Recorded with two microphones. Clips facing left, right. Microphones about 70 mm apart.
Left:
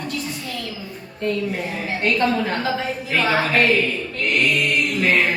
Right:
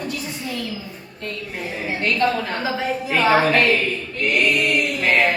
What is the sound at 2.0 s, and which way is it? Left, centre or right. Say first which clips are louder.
Speech: left 1 dB; left.